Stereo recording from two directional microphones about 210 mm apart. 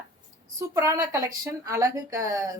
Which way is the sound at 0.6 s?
15° right (ahead or behind).